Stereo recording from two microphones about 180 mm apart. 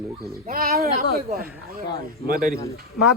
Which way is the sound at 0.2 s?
55° right (ahead or behind).